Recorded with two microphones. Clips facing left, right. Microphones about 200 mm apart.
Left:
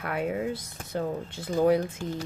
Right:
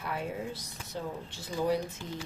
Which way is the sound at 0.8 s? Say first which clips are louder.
Left 7 dB; 55° left (ahead or behind).